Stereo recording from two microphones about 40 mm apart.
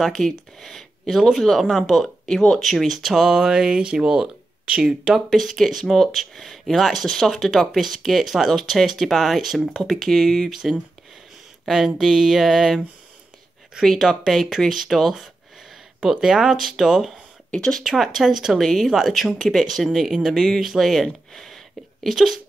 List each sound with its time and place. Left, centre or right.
0.0 s speech: centre
1.6 s speech: centre
2.9 s speech: centre; by 4.8 s right
5.1 s speech: centre
10.5 s speech: centre
13.8 s speech: centre
16.0 s speech: centre
17.5 s speech: left
17.8 s speech: centre
22.1 s speech: centre